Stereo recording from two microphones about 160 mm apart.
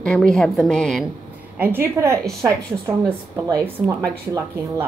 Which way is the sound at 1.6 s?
15° right (ahead or behind).